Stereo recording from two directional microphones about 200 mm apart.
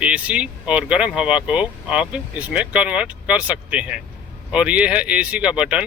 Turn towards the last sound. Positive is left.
turn(degrees=-5)  # may be behind; listen again after turning